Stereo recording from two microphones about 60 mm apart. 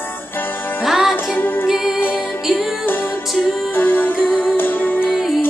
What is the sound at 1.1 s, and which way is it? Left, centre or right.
Music, left.